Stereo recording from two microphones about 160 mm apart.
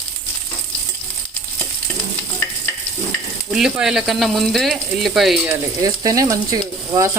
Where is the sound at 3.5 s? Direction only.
5° right (ahead or behind).